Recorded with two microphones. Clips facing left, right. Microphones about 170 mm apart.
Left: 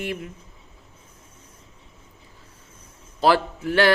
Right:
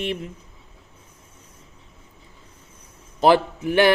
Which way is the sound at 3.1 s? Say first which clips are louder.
Right 3 dB; 20° right (ahead or behind).